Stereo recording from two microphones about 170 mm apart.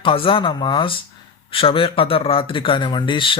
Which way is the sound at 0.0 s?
30° left (ahead or behind).